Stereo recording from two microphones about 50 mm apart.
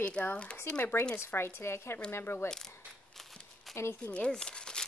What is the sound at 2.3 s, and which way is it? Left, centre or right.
Speech, left.